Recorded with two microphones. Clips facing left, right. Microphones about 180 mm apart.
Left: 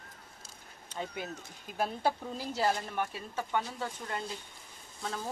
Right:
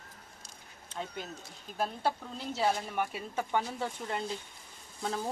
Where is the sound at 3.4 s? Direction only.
20° right (ahead or behind).